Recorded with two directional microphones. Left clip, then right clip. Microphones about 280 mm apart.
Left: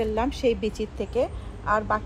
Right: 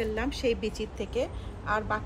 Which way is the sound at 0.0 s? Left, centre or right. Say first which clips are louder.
Left 5 dB; centre.